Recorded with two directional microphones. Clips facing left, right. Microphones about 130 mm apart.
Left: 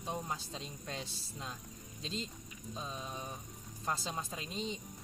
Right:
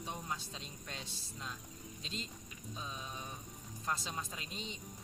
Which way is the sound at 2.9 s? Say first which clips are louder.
Left 3 dB; 35° left (ahead or behind).